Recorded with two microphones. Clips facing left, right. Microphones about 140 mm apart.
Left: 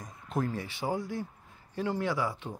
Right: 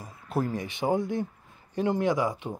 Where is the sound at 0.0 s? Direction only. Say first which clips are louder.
Right 3 dB; 10° right (ahead or behind).